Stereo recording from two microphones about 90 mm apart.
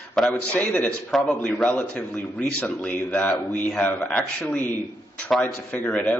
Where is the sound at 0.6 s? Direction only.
20° left (ahead or behind).